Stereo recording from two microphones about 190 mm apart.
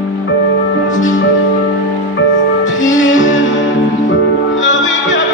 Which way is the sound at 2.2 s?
90° left.